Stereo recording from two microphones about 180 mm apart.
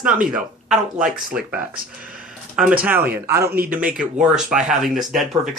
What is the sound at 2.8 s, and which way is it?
Speech, 10° right (ahead or behind).